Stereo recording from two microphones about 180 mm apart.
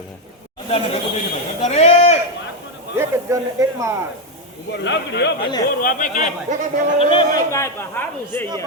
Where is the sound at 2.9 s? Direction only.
15° right (ahead or behind).